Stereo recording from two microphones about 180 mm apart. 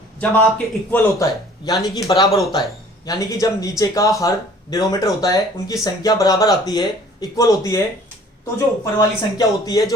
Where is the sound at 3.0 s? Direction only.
20° left (ahead or behind).